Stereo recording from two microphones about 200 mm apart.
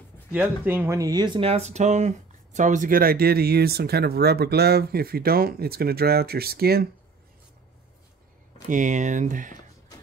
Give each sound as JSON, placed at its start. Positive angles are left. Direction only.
{"t": 0.3, "sound": "speech", "side_deg": -10}
{"t": 8.6, "sound": "speech", "side_deg": -40}